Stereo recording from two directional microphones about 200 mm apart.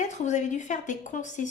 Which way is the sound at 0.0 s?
35° left (ahead or behind).